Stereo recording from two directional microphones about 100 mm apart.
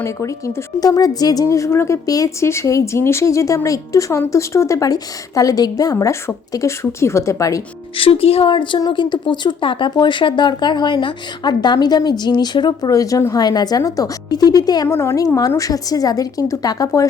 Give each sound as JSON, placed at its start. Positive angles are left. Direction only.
{"t": 0.0, "sound": "a woman's voice", "side_deg": 30}
{"t": 7.9, "sound": "speech", "side_deg": 65}
{"t": 12.9, "sound": "a woman's voice", "side_deg": 35}
{"t": 14.8, "sound": "a woman's voice", "side_deg": 25}